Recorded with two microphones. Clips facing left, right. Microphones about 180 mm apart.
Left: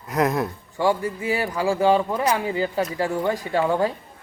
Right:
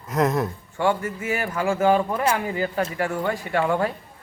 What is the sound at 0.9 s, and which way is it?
Speech, 15° left (ahead or behind).